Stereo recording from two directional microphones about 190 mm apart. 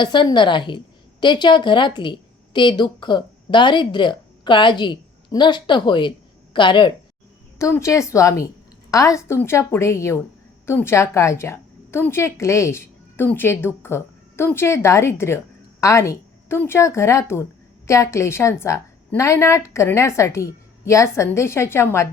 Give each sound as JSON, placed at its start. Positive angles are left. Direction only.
{"t": 0.0, "sound": "a woman's voice", "side_deg": 25}